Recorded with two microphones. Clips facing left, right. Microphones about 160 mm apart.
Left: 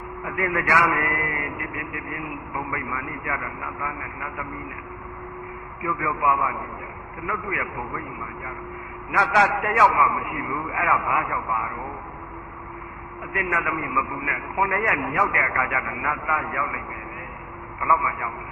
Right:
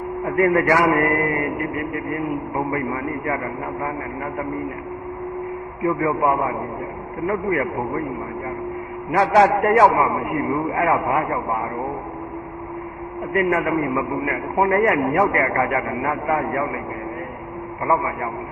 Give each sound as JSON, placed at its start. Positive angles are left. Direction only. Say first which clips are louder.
{"t": 0.3, "sound": "a man's voice", "louder": "right 8 dB", "side_deg": -40}
{"t": 5.8, "sound": "a man's voice", "louder": "right 6 dB", "side_deg": -40}
{"t": 9.1, "sound": "a man's voice", "louder": "right 6 dB", "side_deg": -35}
{"t": 13.4, "sound": "a man's voice", "louder": "right 7 dB", "side_deg": -40}
{"t": 17.8, "sound": "a man's voice", "louder": "right 3 dB", "side_deg": -40}